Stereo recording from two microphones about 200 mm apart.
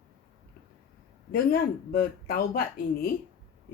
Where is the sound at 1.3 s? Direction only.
50° left (ahead or behind).